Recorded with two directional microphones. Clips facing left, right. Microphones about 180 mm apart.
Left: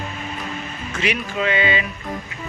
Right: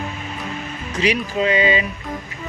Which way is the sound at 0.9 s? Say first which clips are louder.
Right 4 dB; 35° right (ahead or behind).